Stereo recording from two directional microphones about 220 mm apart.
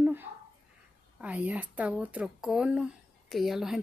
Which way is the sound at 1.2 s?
5° right (ahead or behind).